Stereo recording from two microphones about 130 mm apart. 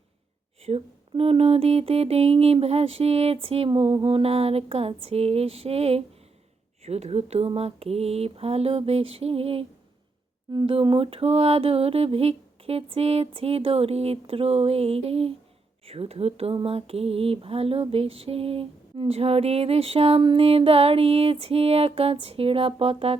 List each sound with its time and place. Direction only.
0.6 s speech: 50° right (ahead or behind)